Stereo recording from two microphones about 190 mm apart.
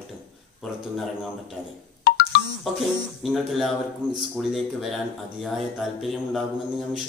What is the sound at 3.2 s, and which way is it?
Speech, centre (ahead or behind).